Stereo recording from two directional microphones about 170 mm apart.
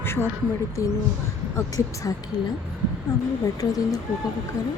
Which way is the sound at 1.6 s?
20° left (ahead or behind).